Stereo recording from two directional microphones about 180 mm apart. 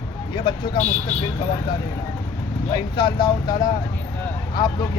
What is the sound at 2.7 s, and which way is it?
Speech, 25° left (ahead or behind).